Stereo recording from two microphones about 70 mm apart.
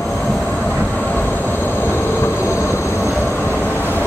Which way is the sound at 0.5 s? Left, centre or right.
Left.